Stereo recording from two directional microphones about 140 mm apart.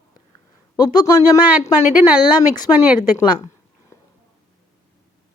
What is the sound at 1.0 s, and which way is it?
Speech, 25° left (ahead or behind).